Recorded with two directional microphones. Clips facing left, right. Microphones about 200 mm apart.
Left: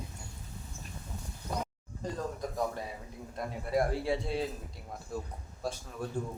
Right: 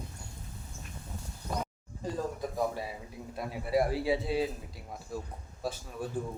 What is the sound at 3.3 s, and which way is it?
Speech, 5° right (ahead or behind).